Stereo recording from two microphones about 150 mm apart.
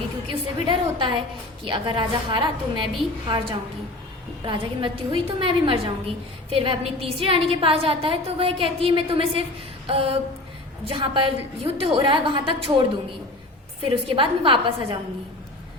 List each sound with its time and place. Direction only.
0.3 s a woman's voice: 35° right (ahead or behind)
4.4 s a woman's voice: 35° right (ahead or behind)
9.8 s a sound: 40° right (ahead or behind)
10.8 s a woman's voice: 35° right (ahead or behind)
13.8 s a woman's voice: 35° right (ahead or behind)